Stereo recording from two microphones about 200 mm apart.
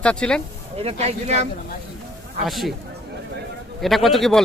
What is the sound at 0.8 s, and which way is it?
Speech, 30° right (ahead or behind).